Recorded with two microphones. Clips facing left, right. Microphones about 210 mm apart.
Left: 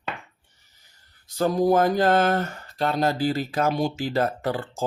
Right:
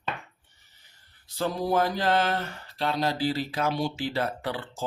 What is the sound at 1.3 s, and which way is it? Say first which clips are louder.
Speech: left 6 dB; 45° left (ahead or behind).